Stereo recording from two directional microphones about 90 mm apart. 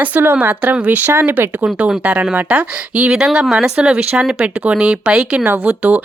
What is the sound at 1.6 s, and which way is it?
Speech, 10° right (ahead or behind).